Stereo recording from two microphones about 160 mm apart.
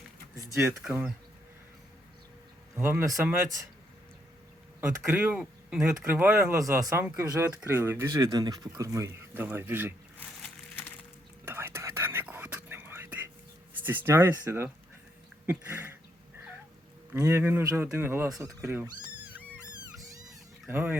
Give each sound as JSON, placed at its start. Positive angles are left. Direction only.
{"t": 0.8, "sound": "speech", "side_deg": -10}
{"t": 2.7, "sound": "speech", "side_deg": -15}
{"t": 4.8, "sound": "speech", "side_deg": -10}
{"t": 11.4, "sound": "whispering", "side_deg": -15}
{"t": 13.8, "sound": "speech", "side_deg": -15}
{"t": 15.4, "sound": "a sound", "side_deg": -15}
{"t": 17.2, "sound": "speech", "side_deg": -15}
{"t": 18.6, "sound": "cat", "side_deg": -15}
{"t": 20.7, "sound": "speech", "side_deg": -15}